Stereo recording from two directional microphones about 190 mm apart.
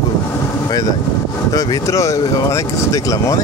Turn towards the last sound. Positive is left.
turn(degrees=15)  # may be behind; listen again after turning